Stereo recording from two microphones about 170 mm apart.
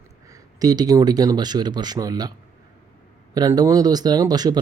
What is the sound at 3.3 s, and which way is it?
Speech, 20° right (ahead or behind).